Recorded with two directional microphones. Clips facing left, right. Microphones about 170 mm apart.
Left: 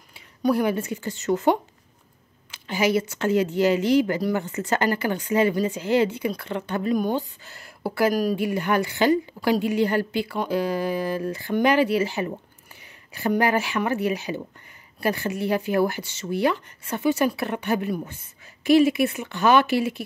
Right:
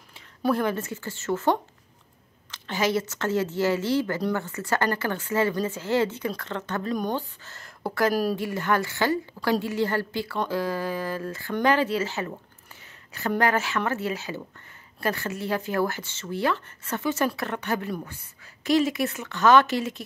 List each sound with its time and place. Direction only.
0.5 s speech: 10° left (ahead or behind)
8.1 s speech: 5° right (ahead or behind)
8.4 s speech: 15° left (ahead or behind)
13.4 s speech: 10° left (ahead or behind)